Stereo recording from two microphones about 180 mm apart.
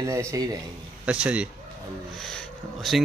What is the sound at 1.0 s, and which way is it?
Speech, 5° right (ahead or behind).